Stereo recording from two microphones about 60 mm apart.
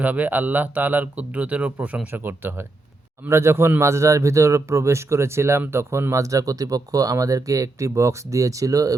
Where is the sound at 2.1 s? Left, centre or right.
Right.